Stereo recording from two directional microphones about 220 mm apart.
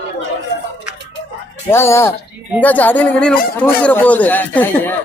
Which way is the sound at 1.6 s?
10° left (ahead or behind).